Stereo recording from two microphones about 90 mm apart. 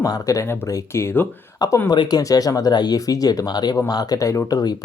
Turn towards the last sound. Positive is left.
turn(degrees=45)  # may be behind; listen again after turning